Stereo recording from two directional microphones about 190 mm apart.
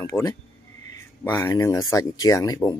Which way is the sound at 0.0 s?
15° left (ahead or behind).